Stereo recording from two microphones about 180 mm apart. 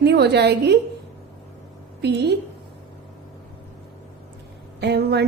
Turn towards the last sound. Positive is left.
turn(degrees=-65)  # may be behind; listen again after turning